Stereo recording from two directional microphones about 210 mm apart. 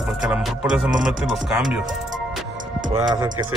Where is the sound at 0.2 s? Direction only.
5° right (ahead or behind).